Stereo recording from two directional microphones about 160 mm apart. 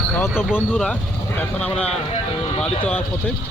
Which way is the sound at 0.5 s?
10° left (ahead or behind).